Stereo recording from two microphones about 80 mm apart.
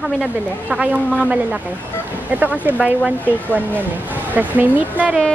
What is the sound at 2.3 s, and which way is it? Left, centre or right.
A woman's voice, right.